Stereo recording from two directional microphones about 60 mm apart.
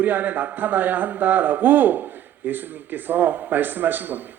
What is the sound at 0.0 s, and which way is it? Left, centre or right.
Speech, right.